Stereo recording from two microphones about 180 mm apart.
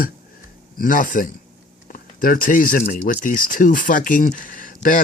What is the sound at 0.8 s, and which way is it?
Speech, 50° left (ahead or behind).